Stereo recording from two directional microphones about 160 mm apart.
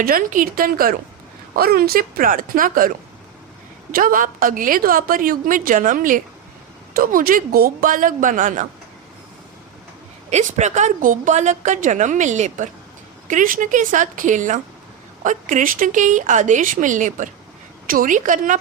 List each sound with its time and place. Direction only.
0.0 s a woman's voice: 60° right (ahead or behind)
3.9 s a woman's voice: 60° right (ahead or behind)
10.2 s a woman's voice: 45° right (ahead or behind)